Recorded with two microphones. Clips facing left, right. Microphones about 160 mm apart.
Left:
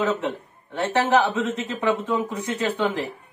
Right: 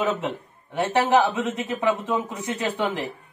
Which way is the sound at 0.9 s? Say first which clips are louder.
Even; 15° right (ahead or behind).